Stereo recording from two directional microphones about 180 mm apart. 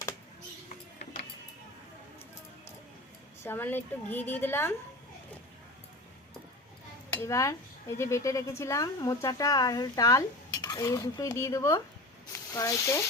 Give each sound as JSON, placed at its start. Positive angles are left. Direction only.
{"t": 3.4, "sound": "a woman's voice", "side_deg": 10}
{"t": 7.1, "sound": "speech", "side_deg": 15}